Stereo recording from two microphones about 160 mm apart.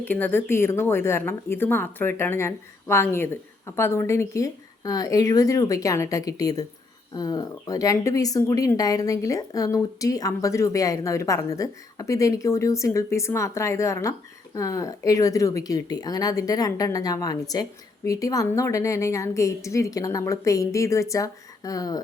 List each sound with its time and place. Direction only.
0.0 s speech: 10° left (ahead or behind)